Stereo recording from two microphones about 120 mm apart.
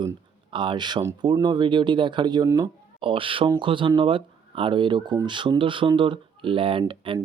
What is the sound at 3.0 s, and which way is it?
Speech, 45° right (ahead or behind).